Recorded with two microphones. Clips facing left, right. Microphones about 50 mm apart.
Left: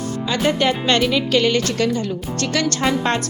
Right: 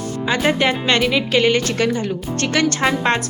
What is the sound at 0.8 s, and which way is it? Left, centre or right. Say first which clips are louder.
Speech: even; centre.